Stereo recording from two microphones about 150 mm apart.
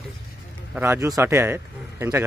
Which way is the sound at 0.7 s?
15° right (ahead or behind).